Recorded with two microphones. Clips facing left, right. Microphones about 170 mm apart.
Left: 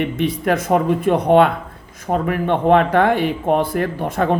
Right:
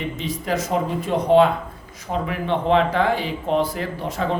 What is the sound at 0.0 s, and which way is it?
Speech, 60° left (ahead or behind).